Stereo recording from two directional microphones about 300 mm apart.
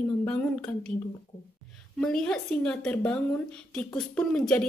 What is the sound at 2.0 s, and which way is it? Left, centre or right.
A woman's voice, centre.